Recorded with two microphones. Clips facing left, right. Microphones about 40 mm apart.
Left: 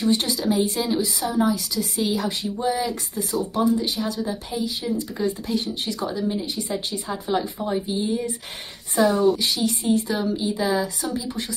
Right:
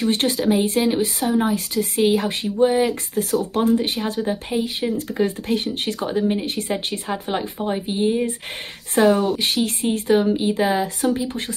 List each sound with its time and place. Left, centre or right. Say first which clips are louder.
0.0 s speech: right 2 dB; right